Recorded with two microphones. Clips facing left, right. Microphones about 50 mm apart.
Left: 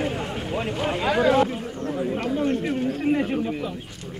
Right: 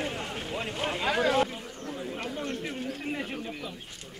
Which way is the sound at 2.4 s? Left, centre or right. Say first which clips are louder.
Left 10 dB; centre.